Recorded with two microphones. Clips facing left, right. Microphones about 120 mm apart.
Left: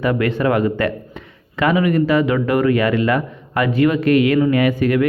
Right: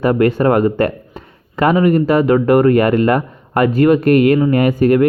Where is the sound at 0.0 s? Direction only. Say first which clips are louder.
Right 5 dB; 40° right (ahead or behind).